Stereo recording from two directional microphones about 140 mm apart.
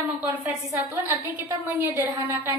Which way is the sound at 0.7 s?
15° right (ahead or behind).